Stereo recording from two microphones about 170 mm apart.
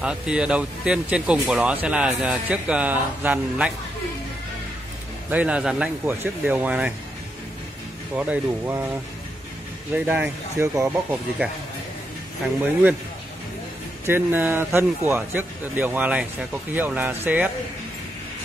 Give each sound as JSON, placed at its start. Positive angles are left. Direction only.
{"t": 0.0, "sound": "speech", "side_deg": -5}
{"t": 5.3, "sound": "speech", "side_deg": -10}
{"t": 8.2, "sound": "speech", "side_deg": -10}
{"t": 9.9, "sound": "speech", "side_deg": -10}
{"t": 14.0, "sound": "speech", "side_deg": -10}